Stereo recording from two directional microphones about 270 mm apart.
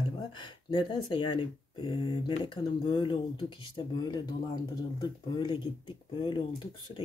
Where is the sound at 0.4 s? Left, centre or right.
Centre.